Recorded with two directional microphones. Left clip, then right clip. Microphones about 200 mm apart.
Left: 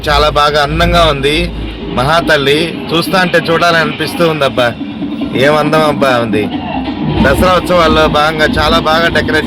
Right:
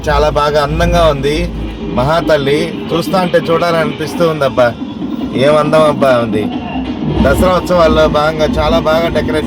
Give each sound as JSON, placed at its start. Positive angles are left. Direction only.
{"t": 0.1, "sound": "a man's voice", "side_deg": 0}
{"t": 3.8, "sound": "speech", "side_deg": 15}
{"t": 7.4, "sound": "speech", "side_deg": 20}
{"t": 8.1, "sound": "a man's voice", "side_deg": 0}